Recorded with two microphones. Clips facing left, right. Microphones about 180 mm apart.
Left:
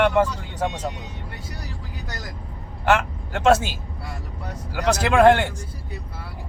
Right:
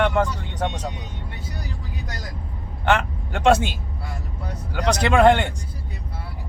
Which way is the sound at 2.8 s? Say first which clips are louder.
Left 1 dB; 5° left (ahead or behind).